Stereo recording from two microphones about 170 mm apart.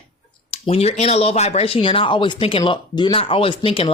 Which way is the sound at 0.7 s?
40° left (ahead or behind).